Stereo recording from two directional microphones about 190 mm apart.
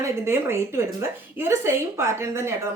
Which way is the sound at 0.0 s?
15° right (ahead or behind).